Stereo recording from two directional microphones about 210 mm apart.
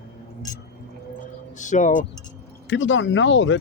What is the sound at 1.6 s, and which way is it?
Speech, 35° left (ahead or behind).